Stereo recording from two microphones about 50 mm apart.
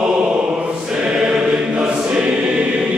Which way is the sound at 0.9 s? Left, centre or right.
Centre.